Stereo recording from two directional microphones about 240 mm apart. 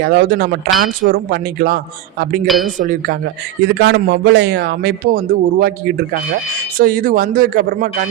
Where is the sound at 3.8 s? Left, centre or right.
Right.